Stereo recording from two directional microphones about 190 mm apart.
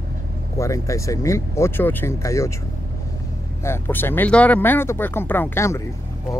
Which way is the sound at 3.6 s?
10° left (ahead or behind).